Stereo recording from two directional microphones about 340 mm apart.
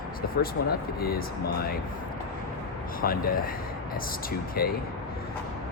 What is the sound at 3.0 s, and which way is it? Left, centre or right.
Speech, left.